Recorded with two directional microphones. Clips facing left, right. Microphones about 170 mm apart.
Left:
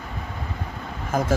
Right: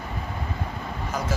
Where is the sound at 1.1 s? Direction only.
50° left (ahead or behind).